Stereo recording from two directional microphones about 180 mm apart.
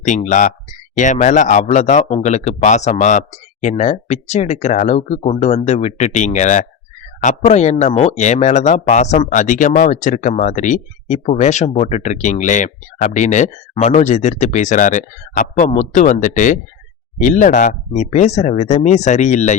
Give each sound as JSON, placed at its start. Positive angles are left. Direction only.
{"t": 0.0, "sound": "speech", "side_deg": 40}